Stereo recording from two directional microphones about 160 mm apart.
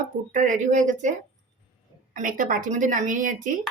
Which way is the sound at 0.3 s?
55° right (ahead or behind).